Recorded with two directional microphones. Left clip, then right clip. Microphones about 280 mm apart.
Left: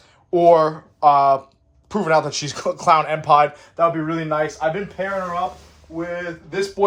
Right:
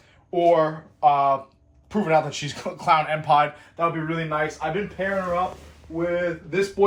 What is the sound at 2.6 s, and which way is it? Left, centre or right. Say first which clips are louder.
Speech: left 4 dB; left.